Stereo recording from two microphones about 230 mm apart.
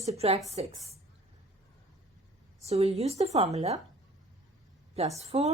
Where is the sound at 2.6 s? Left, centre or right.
Right.